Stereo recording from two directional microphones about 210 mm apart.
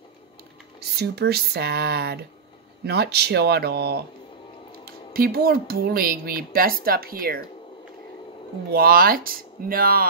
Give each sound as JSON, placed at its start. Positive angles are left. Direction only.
{"t": 0.7, "sound": "speech", "side_deg": -50}
{"t": 8.7, "sound": "speech", "side_deg": -45}